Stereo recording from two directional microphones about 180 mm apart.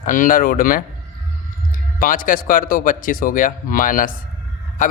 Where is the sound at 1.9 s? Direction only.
50° left (ahead or behind).